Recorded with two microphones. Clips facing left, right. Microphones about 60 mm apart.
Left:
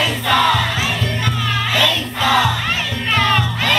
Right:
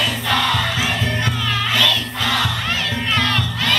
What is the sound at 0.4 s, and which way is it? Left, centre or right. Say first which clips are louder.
Music: left 6 dB; centre.